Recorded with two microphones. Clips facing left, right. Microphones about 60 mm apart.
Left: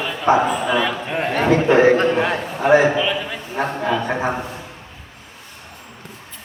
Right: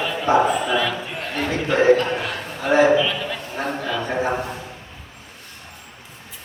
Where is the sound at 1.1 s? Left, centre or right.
Left; by 3.6 s centre.